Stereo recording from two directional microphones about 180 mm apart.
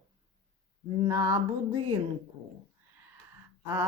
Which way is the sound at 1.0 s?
20° right (ahead or behind).